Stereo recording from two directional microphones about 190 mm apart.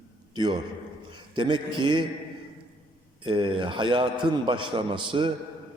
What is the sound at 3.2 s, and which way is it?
A man's voice, 25° right (ahead or behind).